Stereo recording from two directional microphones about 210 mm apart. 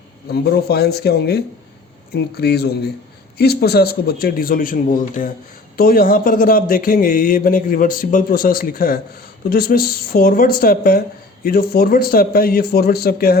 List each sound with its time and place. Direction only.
0.3 s a man's voice: 50° left (ahead or behind)